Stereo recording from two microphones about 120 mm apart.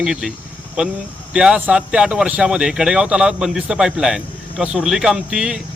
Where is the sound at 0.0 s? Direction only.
5° right (ahead or behind).